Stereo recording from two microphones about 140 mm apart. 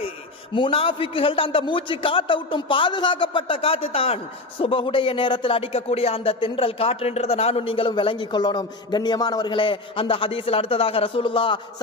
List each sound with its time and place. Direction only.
0.5 s speech: 40° left (ahead or behind)